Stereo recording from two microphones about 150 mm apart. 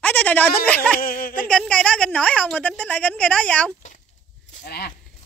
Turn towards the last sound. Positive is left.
turn(degrees=90)